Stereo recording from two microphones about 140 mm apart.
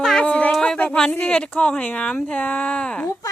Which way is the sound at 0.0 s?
5° left (ahead or behind).